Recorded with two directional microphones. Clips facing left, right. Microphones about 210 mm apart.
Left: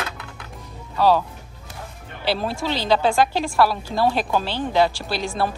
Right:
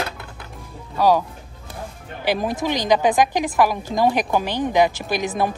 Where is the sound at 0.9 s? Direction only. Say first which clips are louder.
Right 1 dB; 10° right (ahead or behind).